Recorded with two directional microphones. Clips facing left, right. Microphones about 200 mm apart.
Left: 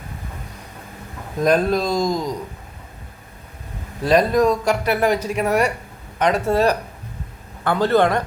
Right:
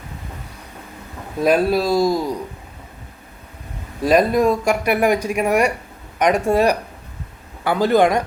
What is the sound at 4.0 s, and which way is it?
Speech, 10° right (ahead or behind).